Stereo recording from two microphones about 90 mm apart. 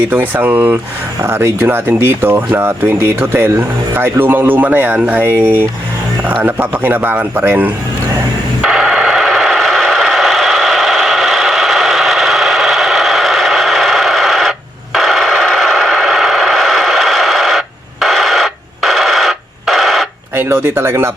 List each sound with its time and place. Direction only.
0.1 s speech: 20° right (ahead or behind)
8.6 s radio: 5° right (ahead or behind)
14.9 s a sound: centre (ahead or behind)
20.3 s speech: 25° right (ahead or behind)